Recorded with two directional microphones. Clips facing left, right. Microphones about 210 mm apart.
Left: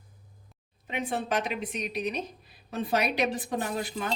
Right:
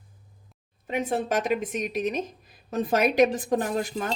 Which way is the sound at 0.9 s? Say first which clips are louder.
Right 4 dB; 45° right (ahead or behind).